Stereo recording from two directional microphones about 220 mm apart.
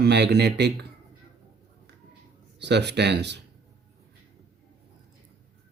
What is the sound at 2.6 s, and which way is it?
Speech, 50° right (ahead or behind).